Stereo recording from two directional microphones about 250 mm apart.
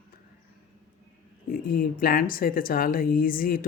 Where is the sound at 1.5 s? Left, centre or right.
Left.